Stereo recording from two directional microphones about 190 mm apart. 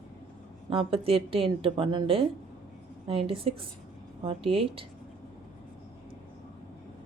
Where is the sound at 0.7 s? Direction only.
30° right (ahead or behind).